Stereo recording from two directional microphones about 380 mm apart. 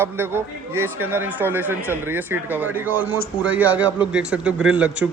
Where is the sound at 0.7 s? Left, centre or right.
Right.